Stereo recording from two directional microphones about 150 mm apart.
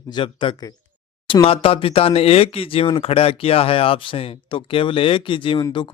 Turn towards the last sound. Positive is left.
turn(degrees=35)  # may be behind; listen again after turning